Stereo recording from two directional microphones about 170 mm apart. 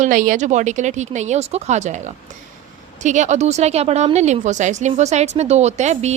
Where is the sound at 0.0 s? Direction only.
50° right (ahead or behind).